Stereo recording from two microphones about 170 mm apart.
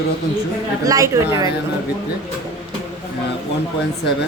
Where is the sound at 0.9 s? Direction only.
20° right (ahead or behind).